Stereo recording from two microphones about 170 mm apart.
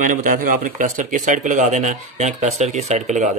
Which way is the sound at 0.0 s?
50° right (ahead or behind).